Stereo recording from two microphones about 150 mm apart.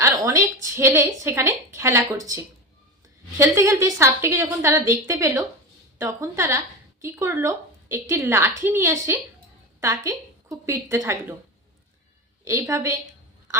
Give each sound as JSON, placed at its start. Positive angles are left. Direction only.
{"t": 0.0, "sound": "a woman's voice", "side_deg": -20}
{"t": 12.5, "sound": "a woman's voice", "side_deg": -20}